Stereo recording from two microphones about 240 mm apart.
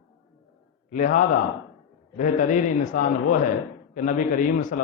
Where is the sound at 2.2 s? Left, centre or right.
Left.